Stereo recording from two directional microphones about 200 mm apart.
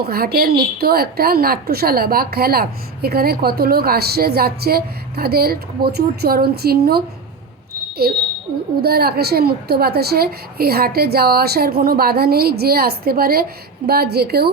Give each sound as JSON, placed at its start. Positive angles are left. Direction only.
{"t": 0.0, "sound": "a woman's voice", "side_deg": -50}
{"t": 8.0, "sound": "a woman's voice", "side_deg": -50}